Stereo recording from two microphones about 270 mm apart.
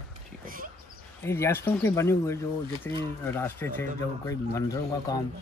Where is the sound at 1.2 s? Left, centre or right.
Centre.